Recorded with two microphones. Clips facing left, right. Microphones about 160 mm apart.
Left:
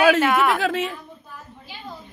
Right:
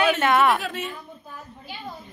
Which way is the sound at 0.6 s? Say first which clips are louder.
Left 7 dB; 90° left.